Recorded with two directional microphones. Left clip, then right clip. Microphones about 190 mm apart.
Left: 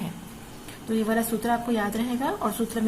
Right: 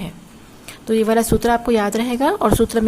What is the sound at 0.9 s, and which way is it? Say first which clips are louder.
A woman's voice: right 10 dB; 50° right (ahead or behind).